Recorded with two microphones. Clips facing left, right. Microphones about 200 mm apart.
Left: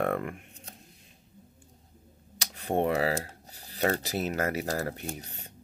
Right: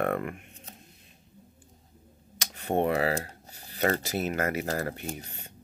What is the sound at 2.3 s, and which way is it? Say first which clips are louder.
Computer keyboard: right 1 dB; 35° left (ahead or behind).